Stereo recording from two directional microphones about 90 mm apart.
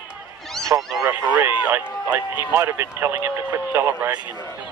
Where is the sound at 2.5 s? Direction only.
30° right (ahead or behind).